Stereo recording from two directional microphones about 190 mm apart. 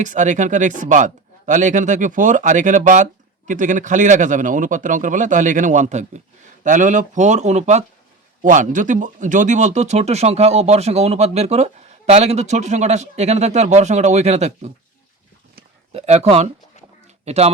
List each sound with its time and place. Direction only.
0.0 s speech: 40° right (ahead or behind)
15.9 s speech: 35° right (ahead or behind)